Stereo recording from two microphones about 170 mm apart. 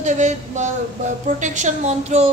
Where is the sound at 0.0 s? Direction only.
45° right (ahead or behind).